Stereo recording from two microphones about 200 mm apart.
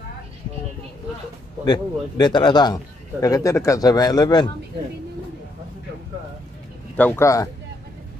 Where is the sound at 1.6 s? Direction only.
20° left (ahead or behind).